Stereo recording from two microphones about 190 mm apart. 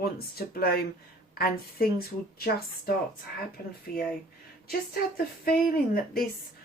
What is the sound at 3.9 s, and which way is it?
Speech, 50° left (ahead or behind).